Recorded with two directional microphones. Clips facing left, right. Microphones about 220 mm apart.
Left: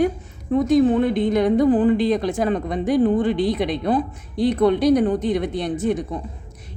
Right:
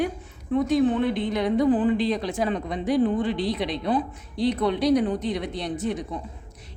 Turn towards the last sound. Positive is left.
turn(degrees=50)  # may be behind; listen again after turning